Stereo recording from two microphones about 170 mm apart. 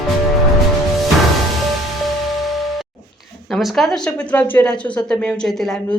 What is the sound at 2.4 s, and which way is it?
Music, centre (ahead or behind).